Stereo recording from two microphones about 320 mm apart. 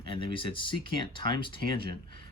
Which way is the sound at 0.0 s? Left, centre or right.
Centre.